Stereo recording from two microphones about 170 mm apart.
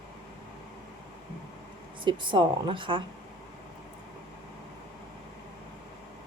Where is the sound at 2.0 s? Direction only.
30° right (ahead or behind).